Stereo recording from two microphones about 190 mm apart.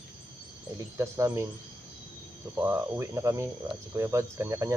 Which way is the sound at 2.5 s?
15° right (ahead or behind).